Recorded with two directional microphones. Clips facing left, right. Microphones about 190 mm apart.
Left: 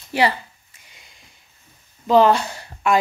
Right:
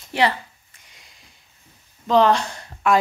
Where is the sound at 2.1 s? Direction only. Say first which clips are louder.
Left 2 dB; 5° left (ahead or behind).